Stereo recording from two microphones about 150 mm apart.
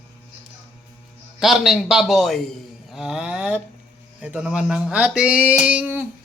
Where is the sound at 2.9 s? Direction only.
5° right (ahead or behind).